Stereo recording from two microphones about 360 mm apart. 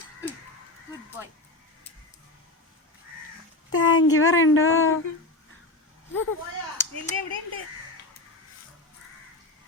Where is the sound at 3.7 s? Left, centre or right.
Left.